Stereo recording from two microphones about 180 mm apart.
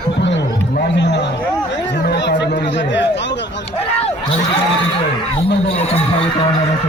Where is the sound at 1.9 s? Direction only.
70° left (ahead or behind).